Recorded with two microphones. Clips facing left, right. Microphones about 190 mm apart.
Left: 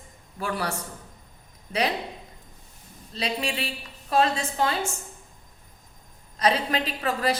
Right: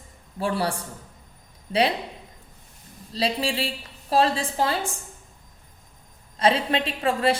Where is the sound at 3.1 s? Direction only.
30° right (ahead or behind).